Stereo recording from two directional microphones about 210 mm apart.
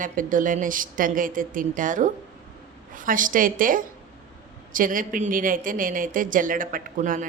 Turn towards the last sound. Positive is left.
turn(degrees=-40)  # may be behind; listen again after turning